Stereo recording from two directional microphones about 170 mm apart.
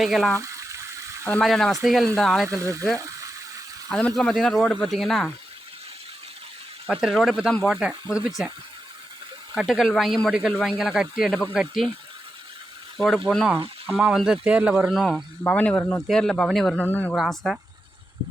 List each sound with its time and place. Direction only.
0.0 s speech: centre (ahead or behind)
0.4 s water: 20° right (ahead or behind)
1.3 s speech: 5° left (ahead or behind)
2.5 s speech: 20° right (ahead or behind)
3.8 s speech: centre (ahead or behind)
6.8 s speech: centre (ahead or behind)
9.6 s speech: centre (ahead or behind)
13.0 s speech: 5° left (ahead or behind)
17.2 s speech: centre (ahead or behind)